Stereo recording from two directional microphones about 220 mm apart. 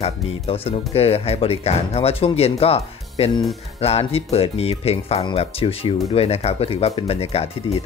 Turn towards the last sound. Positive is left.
turn(degrees=25)  # may be behind; listen again after turning